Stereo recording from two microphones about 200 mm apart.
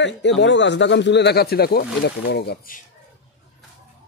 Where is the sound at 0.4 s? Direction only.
65° left (ahead or behind).